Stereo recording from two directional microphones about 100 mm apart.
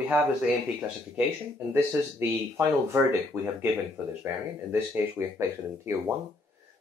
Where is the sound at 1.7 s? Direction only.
20° right (ahead or behind).